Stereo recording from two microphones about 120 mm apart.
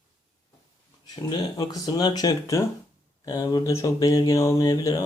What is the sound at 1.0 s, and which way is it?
Speech, 35° left (ahead or behind).